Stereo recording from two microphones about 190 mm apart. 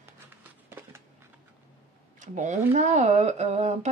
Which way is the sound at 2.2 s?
40° right (ahead or behind).